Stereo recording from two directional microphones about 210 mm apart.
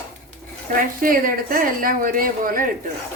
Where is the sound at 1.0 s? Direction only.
40° right (ahead or behind).